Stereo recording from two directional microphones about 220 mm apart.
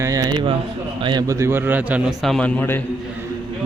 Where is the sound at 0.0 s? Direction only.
15° right (ahead or behind); by 2.8 s 10° left (ahead or behind).